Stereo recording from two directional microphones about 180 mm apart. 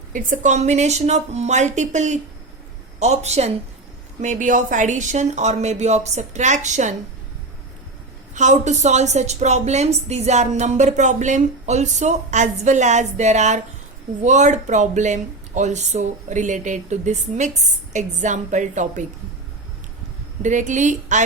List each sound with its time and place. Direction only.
0.1 s a woman's voice: 45° right (ahead or behind)
8.4 s a woman's voice: 40° right (ahead or behind)
20.4 s a woman's voice: 45° right (ahead or behind)